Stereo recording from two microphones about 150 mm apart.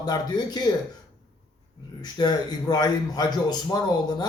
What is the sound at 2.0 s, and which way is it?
A man's voice, 30° left (ahead or behind).